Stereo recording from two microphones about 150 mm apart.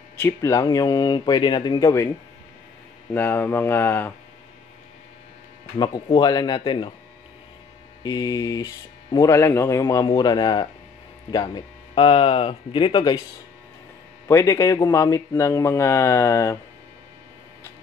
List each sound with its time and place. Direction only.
0.2 s speech: 20° left (ahead or behind)
3.1 s speech: 15° left (ahead or behind)
5.8 s speech: 30° left (ahead or behind)
8.0 s speech: 25° left (ahead or behind)
14.2 s speech: 20° left (ahead or behind)